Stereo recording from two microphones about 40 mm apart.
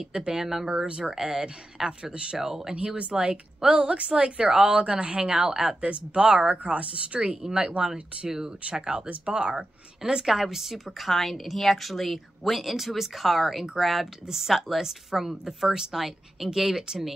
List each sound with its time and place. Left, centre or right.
0.1 s speech: centre
0.7 s speech: right
1.1 s speech: centre
1.4 s speech: right
2.3 s speech: centre
3.0 s speech: right
5.5 s speech: centre
5.8 s speech: right
7.2 s speech: right
10.0 s speech: centre